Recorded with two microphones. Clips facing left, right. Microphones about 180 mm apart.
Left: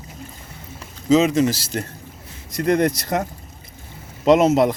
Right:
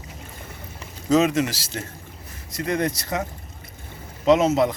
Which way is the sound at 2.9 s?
40° left (ahead or behind).